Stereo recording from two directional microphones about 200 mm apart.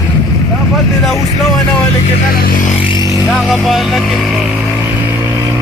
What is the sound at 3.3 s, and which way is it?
Vehicle, centre (ahead or behind).